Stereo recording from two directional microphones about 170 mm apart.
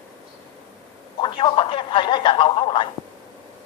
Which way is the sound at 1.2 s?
30° left (ahead or behind).